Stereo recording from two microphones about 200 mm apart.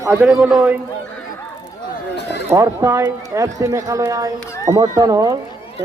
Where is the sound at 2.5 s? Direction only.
15° right (ahead or behind).